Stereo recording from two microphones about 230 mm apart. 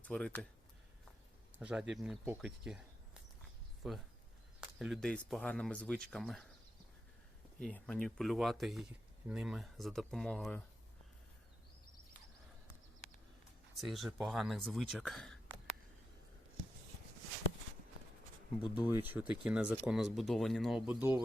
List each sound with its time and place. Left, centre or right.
0.0 s speech: centre
1.5 s speech: centre
3.8 s speech: centre
7.6 s speech: centre
13.8 s speech: centre
18.6 s speech: left
18.9 s speech: centre